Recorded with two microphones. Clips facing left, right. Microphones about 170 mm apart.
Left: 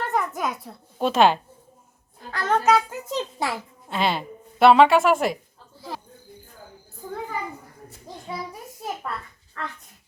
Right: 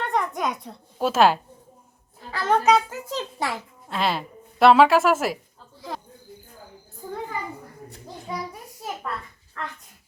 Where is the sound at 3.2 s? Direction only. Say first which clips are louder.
Left 2 dB; 10° left (ahead or behind).